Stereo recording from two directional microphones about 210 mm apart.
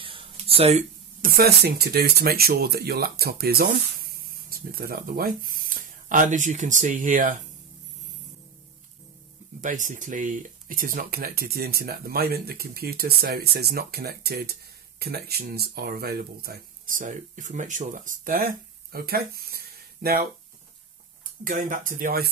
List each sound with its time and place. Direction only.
0.0 s speech: 25° right (ahead or behind)
9.6 s speech: 35° right (ahead or behind)
21.5 s speech: 40° right (ahead or behind)